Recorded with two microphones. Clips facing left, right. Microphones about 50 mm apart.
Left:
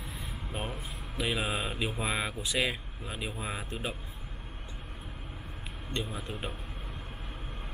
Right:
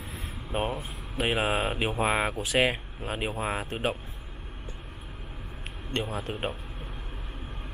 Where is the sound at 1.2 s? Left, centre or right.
Right.